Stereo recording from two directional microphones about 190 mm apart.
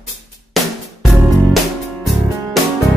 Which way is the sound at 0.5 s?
Centre (ahead or behind).